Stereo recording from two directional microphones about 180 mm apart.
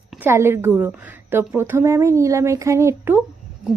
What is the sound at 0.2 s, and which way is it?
A woman's voice, 15° right (ahead or behind).